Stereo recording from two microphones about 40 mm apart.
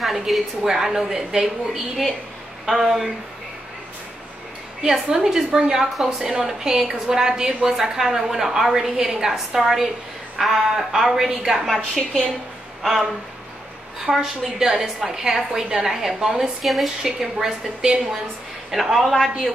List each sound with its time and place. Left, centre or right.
0.3 s a woman's voice: centre
1.7 s a woman's voice: centre
4.8 s a woman's voice: centre
11.5 s speech: centre
14.0 s a woman's voice: centre
17.4 s a woman's voice: centre
18.7 s speech: centre